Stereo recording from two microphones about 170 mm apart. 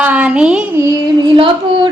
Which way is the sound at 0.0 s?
10° right (ahead or behind).